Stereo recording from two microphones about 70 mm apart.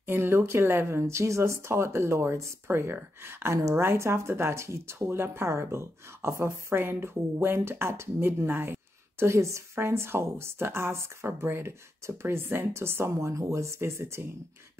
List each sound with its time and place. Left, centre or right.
0.0 s speech: right
13.3 s speech: right